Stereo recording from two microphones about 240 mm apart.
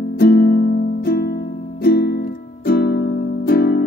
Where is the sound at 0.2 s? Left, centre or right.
Left.